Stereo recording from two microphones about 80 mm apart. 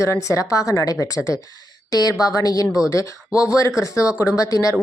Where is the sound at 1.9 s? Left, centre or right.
Left.